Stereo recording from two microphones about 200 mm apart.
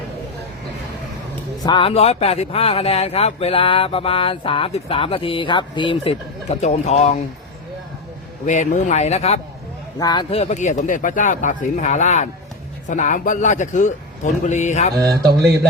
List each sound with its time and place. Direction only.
1.6 s speech: 25° left (ahead or behind)
8.4 s speech: 35° left (ahead or behind)
10.0 s speech: 20° left (ahead or behind)
15.0 s speech: 50° right (ahead or behind)